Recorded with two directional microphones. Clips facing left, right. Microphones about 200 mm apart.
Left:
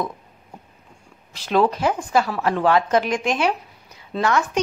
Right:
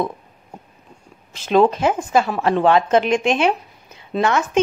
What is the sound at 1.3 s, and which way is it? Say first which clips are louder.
Speech: right 4 dB; 20° right (ahead or behind).